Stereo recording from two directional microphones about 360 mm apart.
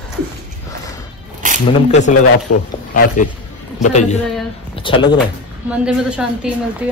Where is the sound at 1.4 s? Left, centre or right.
Right.